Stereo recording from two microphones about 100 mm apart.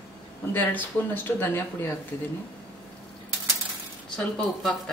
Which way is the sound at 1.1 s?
20° left (ahead or behind).